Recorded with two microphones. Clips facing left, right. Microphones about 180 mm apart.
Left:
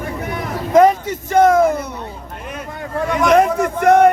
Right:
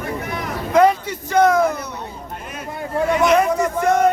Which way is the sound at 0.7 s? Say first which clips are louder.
Left 3 dB; 45° left (ahead or behind).